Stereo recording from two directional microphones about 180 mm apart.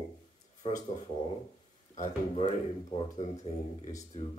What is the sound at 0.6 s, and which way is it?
Speech, 30° left (ahead or behind).